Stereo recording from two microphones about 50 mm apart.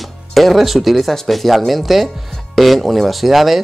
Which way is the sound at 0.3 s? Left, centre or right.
Centre.